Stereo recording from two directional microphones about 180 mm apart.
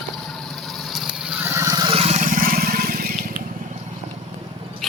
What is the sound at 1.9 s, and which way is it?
Vehicle, 40° right (ahead or behind).